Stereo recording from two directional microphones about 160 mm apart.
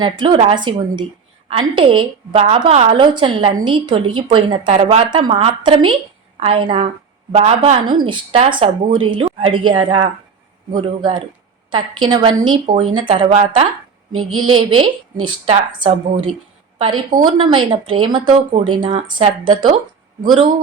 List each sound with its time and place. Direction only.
0.0 s a woman's voice: 30° right (ahead or behind)
7.9 s a woman's voice: 30° right (ahead or behind)
15.2 s a woman's voice: 30° right (ahead or behind)